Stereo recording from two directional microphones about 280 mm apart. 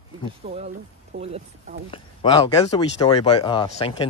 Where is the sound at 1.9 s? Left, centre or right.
Centre.